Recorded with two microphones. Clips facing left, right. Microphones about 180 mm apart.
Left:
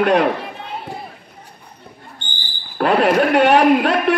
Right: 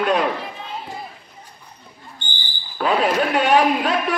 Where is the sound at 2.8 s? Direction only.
60° left (ahead or behind).